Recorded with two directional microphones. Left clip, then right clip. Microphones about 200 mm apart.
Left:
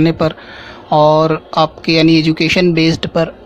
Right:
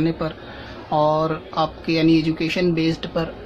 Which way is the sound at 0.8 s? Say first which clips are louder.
Left 9 dB; 45° left (ahead or behind).